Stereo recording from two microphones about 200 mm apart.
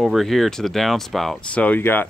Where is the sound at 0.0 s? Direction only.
Centre (ahead or behind).